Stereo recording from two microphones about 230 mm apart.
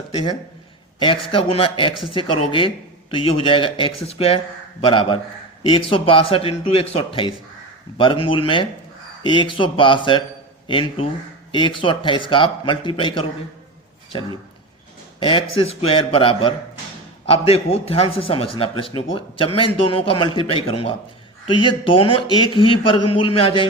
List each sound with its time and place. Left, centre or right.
0.9 s a man's voice: left